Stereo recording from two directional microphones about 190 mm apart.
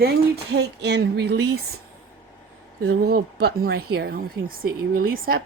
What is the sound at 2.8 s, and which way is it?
Speech, 55° right (ahead or behind).